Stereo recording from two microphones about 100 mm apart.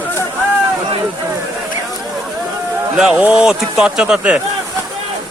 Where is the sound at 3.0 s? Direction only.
5° right (ahead or behind).